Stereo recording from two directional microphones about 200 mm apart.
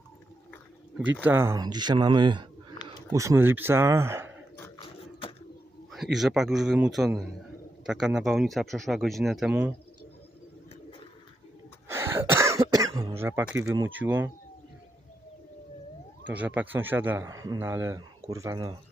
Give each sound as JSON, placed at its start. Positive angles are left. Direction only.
{"t": 1.2, "sound": "speech", "side_deg": -10}
{"t": 5.9, "sound": "speech", "side_deg": 0}
{"t": 11.9, "sound": "cough", "side_deg": -10}
{"t": 13.2, "sound": "a man's voice", "side_deg": -10}
{"t": 16.3, "sound": "a man's voice", "side_deg": -5}